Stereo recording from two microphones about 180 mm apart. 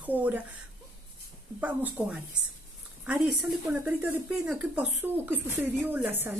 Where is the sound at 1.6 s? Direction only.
10° right (ahead or behind).